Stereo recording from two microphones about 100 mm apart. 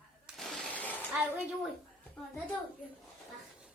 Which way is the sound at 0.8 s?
15° left (ahead or behind).